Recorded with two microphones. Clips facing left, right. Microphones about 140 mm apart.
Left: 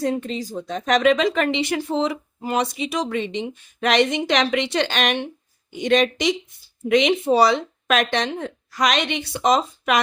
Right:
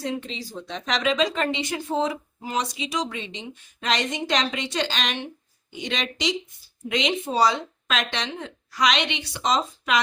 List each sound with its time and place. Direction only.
0.0 s a woman's voice: 45° left (ahead or behind)